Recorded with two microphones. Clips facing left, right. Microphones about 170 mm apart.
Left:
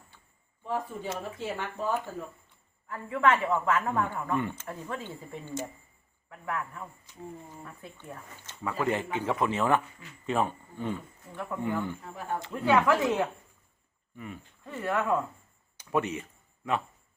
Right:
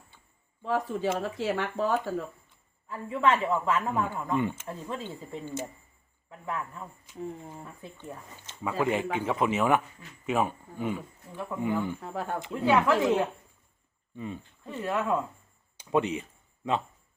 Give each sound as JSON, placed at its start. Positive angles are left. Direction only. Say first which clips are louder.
{"t": 0.6, "sound": "speech", "louder": "right 5 dB", "side_deg": -90}
{"t": 2.9, "sound": "speech", "louder": "even", "side_deg": -15}